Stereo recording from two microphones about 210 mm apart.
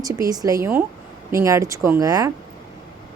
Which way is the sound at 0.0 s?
15° right (ahead or behind).